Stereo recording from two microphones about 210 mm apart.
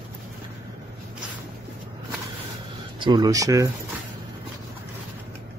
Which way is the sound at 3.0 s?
20° right (ahead or behind).